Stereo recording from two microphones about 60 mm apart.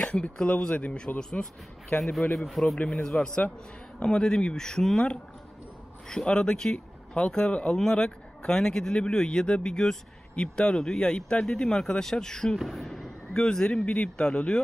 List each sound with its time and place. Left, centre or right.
0.0 s speech: centre
2.3 s speech: centre
2.8 s speech: centre
6.0 s speech: centre